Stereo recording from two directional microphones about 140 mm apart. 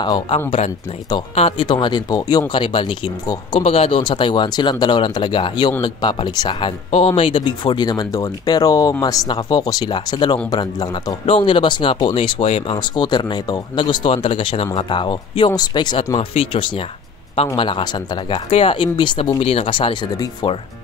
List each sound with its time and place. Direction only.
0.0 s speech: 35° left (ahead or behind)
1.3 s speech: 45° left (ahead or behind); by 11.1 s 30° left (ahead or behind)
11.2 s speech: 40° left (ahead or behind)